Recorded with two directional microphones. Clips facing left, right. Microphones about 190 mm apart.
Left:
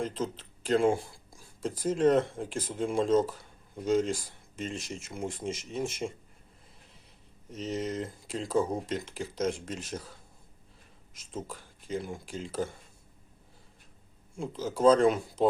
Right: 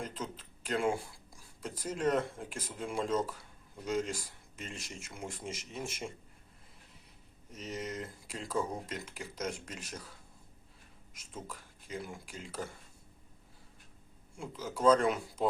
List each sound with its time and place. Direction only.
0.0 s speech: 30° left (ahead or behind)
7.5 s speech: 25° left (ahead or behind)
11.3 s speech: 25° left (ahead or behind)
14.3 s speech: 25° left (ahead or behind)